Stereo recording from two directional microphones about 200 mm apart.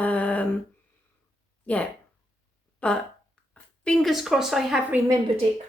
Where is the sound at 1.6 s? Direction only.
5° left (ahead or behind).